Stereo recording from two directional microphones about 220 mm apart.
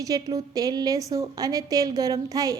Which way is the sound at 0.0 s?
15° right (ahead or behind).